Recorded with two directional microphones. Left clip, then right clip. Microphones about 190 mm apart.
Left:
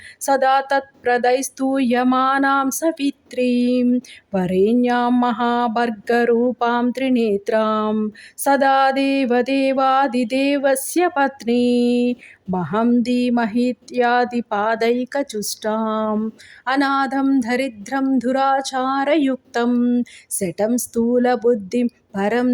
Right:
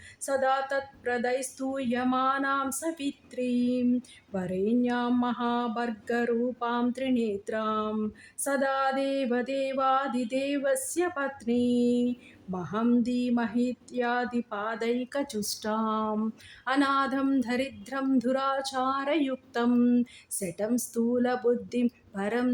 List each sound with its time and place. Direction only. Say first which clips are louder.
0.2 s a woman's voice: left 11 dB; 45° left (ahead or behind)
19.7 s speech: left 6 dB; 25° left (ahead or behind)
20.4 s a woman's voice: left 10 dB; 35° left (ahead or behind)